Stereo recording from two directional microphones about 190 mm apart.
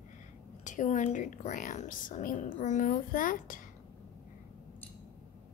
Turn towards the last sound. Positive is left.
turn(degrees=45)  # may be behind; listen again after turning